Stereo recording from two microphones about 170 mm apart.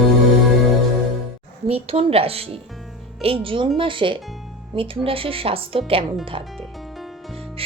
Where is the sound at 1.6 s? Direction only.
35° right (ahead or behind).